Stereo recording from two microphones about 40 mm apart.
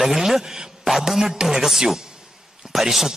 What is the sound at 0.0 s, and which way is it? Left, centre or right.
A man's voice, centre.